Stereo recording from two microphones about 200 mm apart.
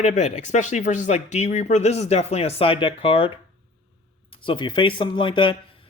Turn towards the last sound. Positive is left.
turn(degrees=25)  # may be behind; listen again after turning